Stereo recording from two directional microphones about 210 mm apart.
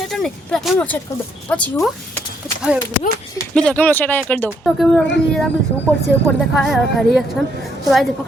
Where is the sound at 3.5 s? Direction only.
5° left (ahead or behind).